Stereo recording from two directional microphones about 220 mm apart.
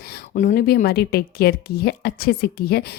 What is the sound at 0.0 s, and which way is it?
A woman's voice, 45° left (ahead or behind).